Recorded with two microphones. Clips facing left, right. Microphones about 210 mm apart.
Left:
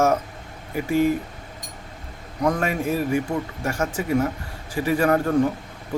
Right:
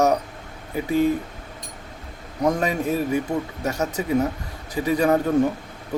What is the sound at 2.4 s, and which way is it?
A man's voice, 20° right (ahead or behind).